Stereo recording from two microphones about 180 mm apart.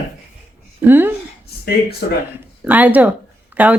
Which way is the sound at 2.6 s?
10° right (ahead or behind).